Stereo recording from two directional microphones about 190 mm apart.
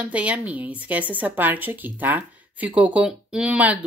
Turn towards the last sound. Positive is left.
turn(degrees=-5)  # may be behind; listen again after turning